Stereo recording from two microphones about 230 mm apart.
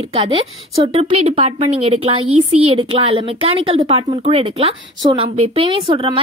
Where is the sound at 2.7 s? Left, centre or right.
Right.